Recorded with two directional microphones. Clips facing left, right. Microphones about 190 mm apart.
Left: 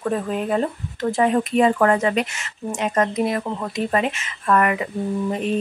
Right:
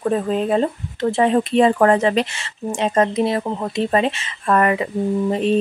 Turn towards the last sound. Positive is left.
turn(degrees=-30)  # may be behind; listen again after turning